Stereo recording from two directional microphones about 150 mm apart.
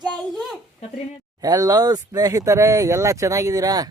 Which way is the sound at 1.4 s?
25° right (ahead or behind).